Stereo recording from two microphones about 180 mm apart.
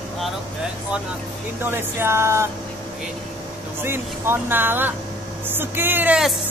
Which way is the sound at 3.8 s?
10° right (ahead or behind).